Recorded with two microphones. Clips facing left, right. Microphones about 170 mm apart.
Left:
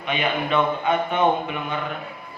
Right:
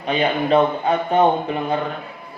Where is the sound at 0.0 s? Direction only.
35° right (ahead or behind).